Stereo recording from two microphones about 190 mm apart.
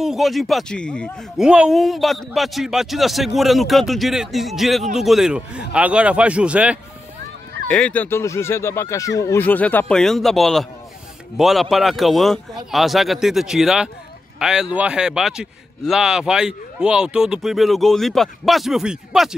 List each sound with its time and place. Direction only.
0.0 s a man's voice: centre (ahead or behind)
7.7 s a man's voice: 10° left (ahead or behind)